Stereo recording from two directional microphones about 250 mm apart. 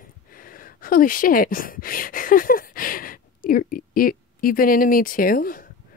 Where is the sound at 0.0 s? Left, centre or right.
Left.